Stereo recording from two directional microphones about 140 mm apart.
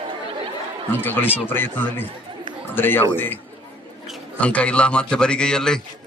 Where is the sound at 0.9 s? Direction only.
15° left (ahead or behind).